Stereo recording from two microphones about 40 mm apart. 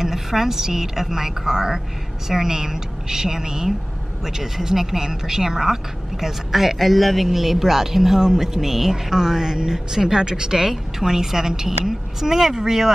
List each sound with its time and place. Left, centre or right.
0.0 s speech: centre